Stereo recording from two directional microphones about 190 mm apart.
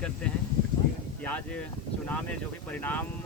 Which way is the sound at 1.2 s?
5° left (ahead or behind).